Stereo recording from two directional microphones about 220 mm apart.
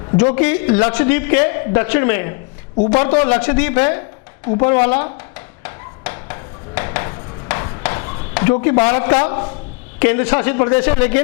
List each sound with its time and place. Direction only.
0.2 s a man's voice: 25° left (ahead or behind)
5.6 s a sound: 15° left (ahead or behind)
8.9 s a man's voice: 20° left (ahead or behind)